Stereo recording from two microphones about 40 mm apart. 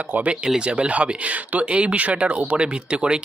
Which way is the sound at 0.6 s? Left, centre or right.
Right.